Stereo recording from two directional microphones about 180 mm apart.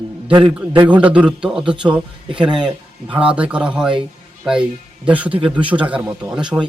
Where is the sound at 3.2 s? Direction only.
5° right (ahead or behind).